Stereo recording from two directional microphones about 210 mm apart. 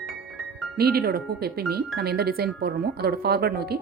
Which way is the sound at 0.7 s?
50° right (ahead or behind).